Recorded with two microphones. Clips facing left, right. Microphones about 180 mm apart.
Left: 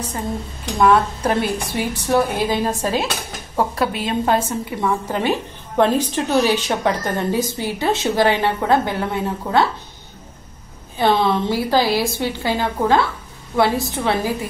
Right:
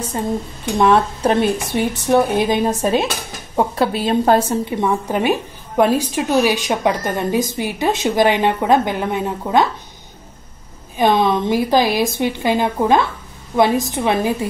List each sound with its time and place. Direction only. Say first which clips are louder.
0.7 s a woman's voice: right 1 dB; 25° right (ahead or behind)
4.7 s a woman's voice: right 1 dB; 15° right (ahead or behind)
11.0 s a woman's voice: right 2 dB; 15° right (ahead or behind)